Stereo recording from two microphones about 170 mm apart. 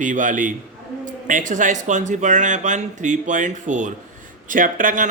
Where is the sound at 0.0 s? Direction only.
50° right (ahead or behind).